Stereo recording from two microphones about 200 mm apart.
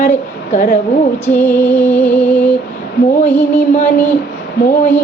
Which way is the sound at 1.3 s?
10° left (ahead or behind).